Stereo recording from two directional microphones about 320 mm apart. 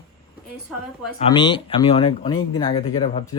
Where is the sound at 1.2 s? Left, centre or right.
Centre.